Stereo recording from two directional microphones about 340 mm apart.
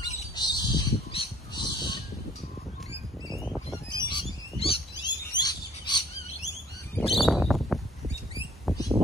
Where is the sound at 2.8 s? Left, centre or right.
Centre.